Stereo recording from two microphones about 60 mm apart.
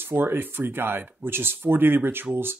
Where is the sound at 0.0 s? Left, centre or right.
Right.